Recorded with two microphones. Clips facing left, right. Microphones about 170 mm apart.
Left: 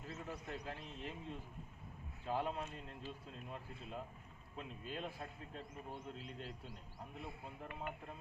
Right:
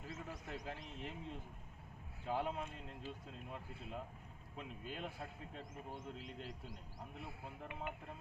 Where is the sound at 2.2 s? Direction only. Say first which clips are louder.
Even; 10° right (ahead or behind).